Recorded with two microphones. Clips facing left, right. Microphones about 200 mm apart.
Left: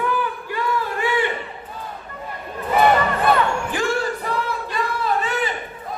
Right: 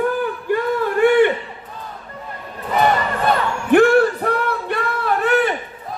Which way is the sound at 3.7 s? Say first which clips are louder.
Right 10 dB; 60° right (ahead or behind).